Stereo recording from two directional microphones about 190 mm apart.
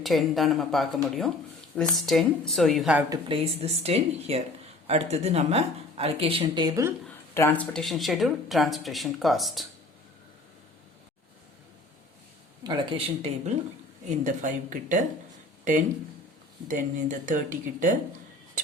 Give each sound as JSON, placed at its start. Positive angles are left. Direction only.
{"t": 0.0, "sound": "speech", "side_deg": 0}
{"t": 3.1, "sound": "speech", "side_deg": -30}
{"t": 7.3, "sound": "speech", "side_deg": 10}
{"t": 12.6, "sound": "speech", "side_deg": -25}
{"t": 14.3, "sound": "speech", "side_deg": -45}
{"t": 16.6, "sound": "speech", "side_deg": -45}